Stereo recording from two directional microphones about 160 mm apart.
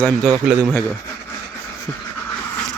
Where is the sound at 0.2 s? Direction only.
Centre (ahead or behind).